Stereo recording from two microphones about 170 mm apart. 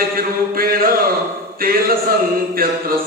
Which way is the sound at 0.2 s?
60° right (ahead or behind).